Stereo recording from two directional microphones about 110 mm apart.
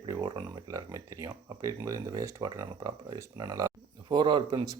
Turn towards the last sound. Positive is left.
turn(degrees=-45)  # may be behind; listen again after turning